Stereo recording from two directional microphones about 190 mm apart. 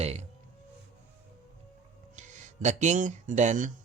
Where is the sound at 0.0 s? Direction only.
35° right (ahead or behind).